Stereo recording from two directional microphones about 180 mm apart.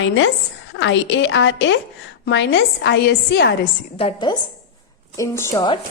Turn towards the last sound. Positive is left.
turn(degrees=15)  # may be behind; listen again after turning